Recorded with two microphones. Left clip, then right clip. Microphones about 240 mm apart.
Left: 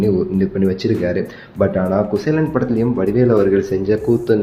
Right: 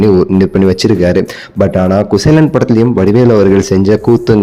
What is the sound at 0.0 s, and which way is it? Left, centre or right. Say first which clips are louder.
A man's voice: right 9 dB; right.